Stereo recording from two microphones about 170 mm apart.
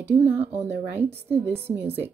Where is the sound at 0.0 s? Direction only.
10° right (ahead or behind).